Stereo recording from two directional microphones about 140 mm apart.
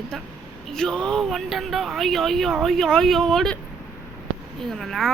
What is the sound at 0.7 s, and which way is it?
Speech, 5° left (ahead or behind).